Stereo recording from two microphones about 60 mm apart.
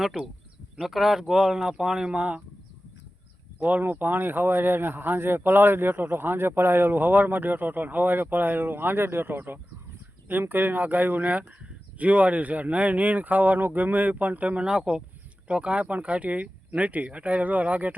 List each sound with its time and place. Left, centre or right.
0.0 s speech: centre
3.6 s speech: right
14.6 s speech: centre